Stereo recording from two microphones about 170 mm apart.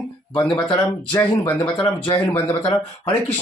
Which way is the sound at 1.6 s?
30° left (ahead or behind).